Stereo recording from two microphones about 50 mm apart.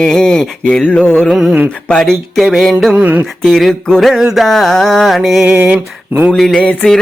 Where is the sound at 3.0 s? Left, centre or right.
Right.